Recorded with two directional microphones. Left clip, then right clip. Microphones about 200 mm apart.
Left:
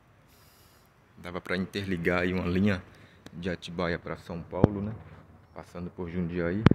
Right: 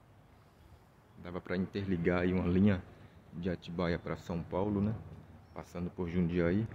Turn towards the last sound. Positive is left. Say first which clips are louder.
# left 1 dB
turn(degrees=-10)  # may be behind; listen again after turning